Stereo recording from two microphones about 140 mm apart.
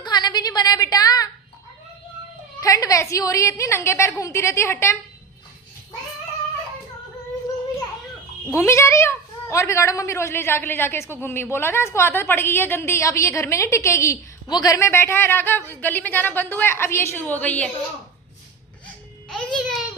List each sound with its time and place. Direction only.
0.0 s a sound: 30° left (ahead or behind)
2.6 s a woman's voice: 25° left (ahead or behind)
8.5 s a woman's voice: 20° left (ahead or behind)
19.3 s music: centre (ahead or behind)